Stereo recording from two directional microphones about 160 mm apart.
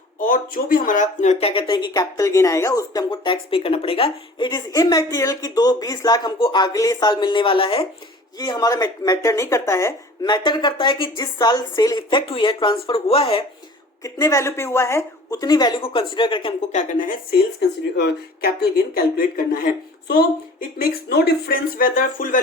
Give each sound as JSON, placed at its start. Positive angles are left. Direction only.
{"t": 0.2, "sound": "speech", "side_deg": 55}
{"t": 8.4, "sound": "speech", "side_deg": 25}
{"t": 14.0, "sound": "speech", "side_deg": 20}
{"t": 16.6, "sound": "speech", "side_deg": 50}
{"t": 17.6, "sound": "speech", "side_deg": 90}
{"t": 20.1, "sound": "speech", "side_deg": 70}